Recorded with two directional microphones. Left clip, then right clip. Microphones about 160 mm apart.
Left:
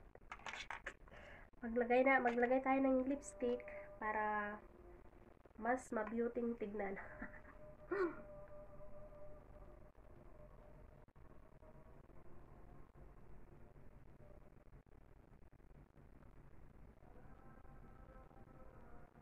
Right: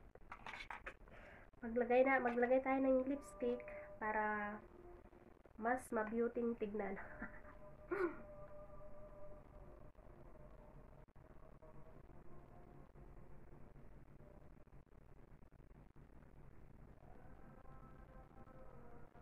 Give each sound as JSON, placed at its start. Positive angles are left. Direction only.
{"t": 0.3, "sound": "a sound", "side_deg": 65}
{"t": 0.8, "sound": "a woman's voice", "side_deg": 5}
{"t": 5.6, "sound": "speech", "side_deg": -5}